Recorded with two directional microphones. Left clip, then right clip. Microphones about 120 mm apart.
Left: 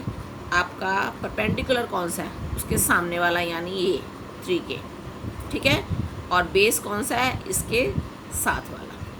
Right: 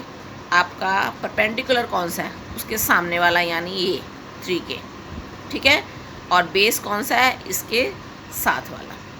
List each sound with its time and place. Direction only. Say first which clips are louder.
0.5 s a woman's voice: right 5 dB; 10° right (ahead or behind)